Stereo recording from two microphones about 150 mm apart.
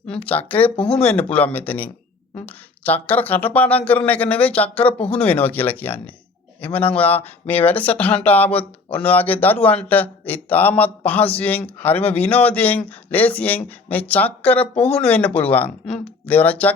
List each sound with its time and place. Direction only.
0.1 s speech: 10° left (ahead or behind)
0.8 s speech: 40° left (ahead or behind)
1.3 s speech: 10° left (ahead or behind)
14.8 s speech: 40° left (ahead or behind)
15.0 s speech: 10° left (ahead or behind)